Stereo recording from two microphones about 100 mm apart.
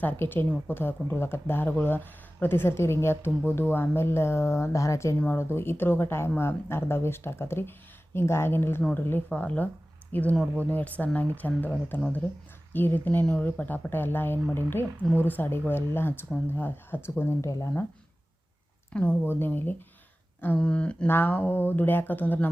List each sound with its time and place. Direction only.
0.0 s a woman's voice: 20° left (ahead or behind)
18.9 s a woman's voice: 15° left (ahead or behind)